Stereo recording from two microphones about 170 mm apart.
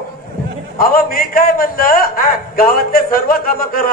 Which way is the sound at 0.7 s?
60° left (ahead or behind).